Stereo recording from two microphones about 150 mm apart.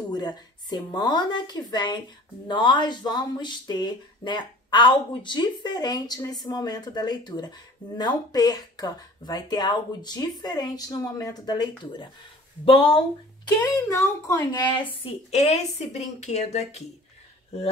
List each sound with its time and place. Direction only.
0.1 s speech: 25° left (ahead or behind)
13.5 s speech: 20° left (ahead or behind)
15.0 s a woman's voice: 45° left (ahead or behind)